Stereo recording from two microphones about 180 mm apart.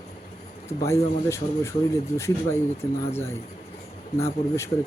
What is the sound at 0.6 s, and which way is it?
Speech, 15° left (ahead or behind).